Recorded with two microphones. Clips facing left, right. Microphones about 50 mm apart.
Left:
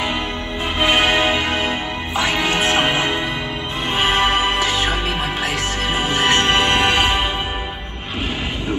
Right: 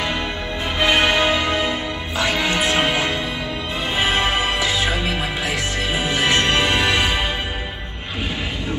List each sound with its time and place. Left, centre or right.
0.7 s music: left
5.9 s music: left